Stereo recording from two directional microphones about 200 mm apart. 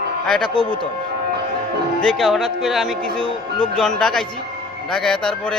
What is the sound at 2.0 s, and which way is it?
A man's voice, centre (ahead or behind).